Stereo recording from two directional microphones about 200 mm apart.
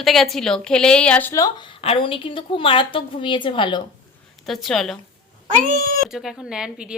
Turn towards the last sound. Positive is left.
turn(degrees=-5)  # may be behind; listen again after turning